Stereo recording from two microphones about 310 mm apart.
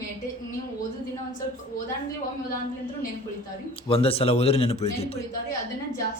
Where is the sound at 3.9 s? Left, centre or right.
Centre.